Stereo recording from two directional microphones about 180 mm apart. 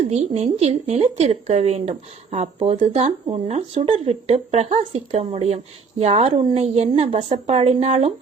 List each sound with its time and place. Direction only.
0.0 s a woman's voice: 40° right (ahead or behind)